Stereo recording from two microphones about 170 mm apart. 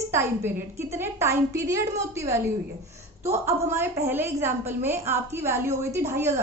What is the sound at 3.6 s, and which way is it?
A woman's voice, 15° right (ahead or behind).